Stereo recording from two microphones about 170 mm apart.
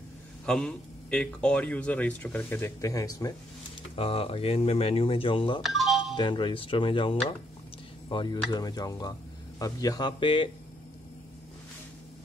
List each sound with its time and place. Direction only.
0.5 s speech: 5° left (ahead or behind); by 3.3 s 20° left (ahead or behind)
3.9 s speech: 35° left (ahead or behind)
5.6 s music: centre (ahead or behind)
6.1 s speech: 25° left (ahead or behind)